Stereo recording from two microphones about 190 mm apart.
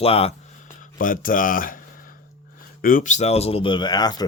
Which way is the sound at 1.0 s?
45° left (ahead or behind).